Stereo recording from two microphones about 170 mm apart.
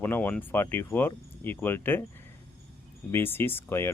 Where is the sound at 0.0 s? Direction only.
10° left (ahead or behind).